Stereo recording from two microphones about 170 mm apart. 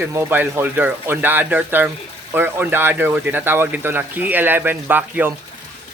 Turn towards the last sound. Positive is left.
turn(degrees=-10)  # may be behind; listen again after turning